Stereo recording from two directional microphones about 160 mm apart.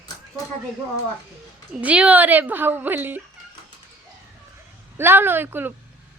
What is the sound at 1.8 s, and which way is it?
A woman's voice, 10° right (ahead or behind).